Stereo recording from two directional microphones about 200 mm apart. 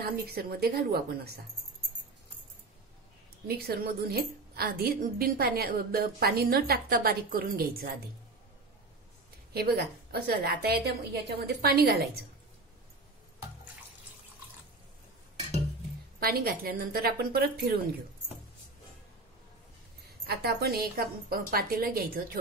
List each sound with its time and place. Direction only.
0.0 s a woman's voice: 50° right (ahead or behind)
3.4 s a woman's voice: 50° right (ahead or behind)
9.5 s a woman's voice: 50° right (ahead or behind)
16.2 s a woman's voice: 50° right (ahead or behind)
20.2 s a woman's voice: 50° right (ahead or behind)